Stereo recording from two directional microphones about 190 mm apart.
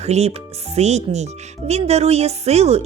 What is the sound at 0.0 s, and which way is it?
Speech, 35° right (ahead or behind).